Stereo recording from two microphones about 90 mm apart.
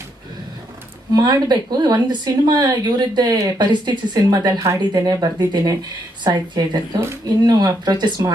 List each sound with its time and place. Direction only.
1.1 s speech: 50° right (ahead or behind)
4.6 s speech: 35° right (ahead or behind)
4.9 s speech: 50° right (ahead or behind)